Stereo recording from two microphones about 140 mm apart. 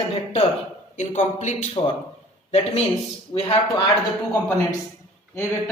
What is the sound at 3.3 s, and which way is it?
Speech, 40° left (ahead or behind).